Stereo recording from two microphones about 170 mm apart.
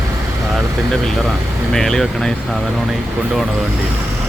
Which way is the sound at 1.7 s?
5° left (ahead or behind).